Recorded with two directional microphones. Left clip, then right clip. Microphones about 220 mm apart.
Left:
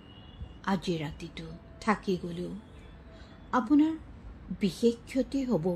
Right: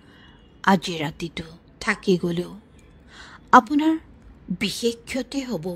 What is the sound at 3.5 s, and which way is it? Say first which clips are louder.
A woman's voice: right 11 dB; 40° right (ahead or behind).